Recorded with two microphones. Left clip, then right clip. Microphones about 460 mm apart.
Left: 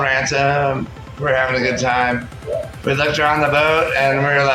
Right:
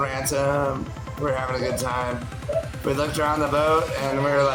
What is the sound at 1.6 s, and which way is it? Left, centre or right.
Speech, right.